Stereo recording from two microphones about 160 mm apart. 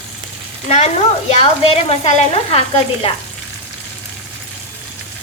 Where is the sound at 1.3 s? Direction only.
35° left (ahead or behind).